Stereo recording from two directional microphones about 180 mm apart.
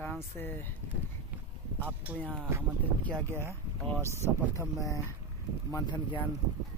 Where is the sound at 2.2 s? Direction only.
5° right (ahead or behind).